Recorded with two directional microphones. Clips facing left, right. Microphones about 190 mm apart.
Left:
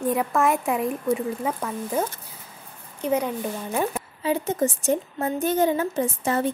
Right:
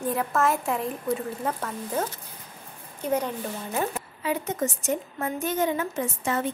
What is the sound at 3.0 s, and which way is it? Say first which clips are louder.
Speech: left 3 dB; 10° left (ahead or behind).